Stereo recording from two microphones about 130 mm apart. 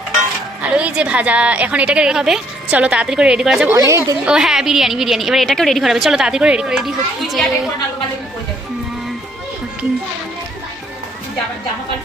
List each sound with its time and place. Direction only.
0.6 s a woman's voice: 10° right (ahead or behind)
3.8 s a woman's voice: 25° right (ahead or behind)
4.3 s a woman's voice: 5° right (ahead or behind)